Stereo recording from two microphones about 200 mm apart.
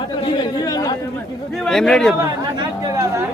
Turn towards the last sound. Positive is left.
turn(degrees=-15)  # may be behind; listen again after turning